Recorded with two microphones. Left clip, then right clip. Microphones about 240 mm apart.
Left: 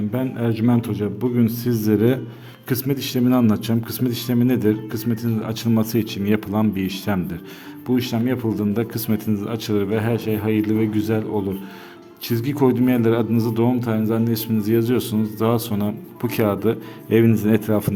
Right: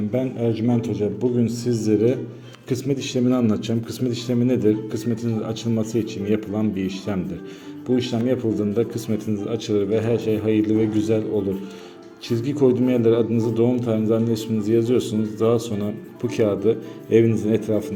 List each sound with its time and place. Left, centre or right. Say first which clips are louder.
0.1 s a man's voice: right 3 dB; centre
12.3 s a man's voice: even; left